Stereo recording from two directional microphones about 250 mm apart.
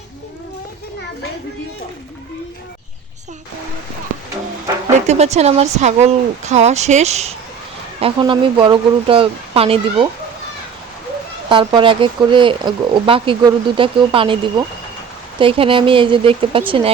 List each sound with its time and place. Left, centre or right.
4.9 s speech: right
11.4 s speech: centre
15.4 s speech: right